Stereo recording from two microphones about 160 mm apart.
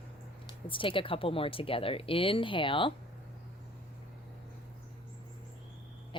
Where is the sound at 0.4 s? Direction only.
35° left (ahead or behind).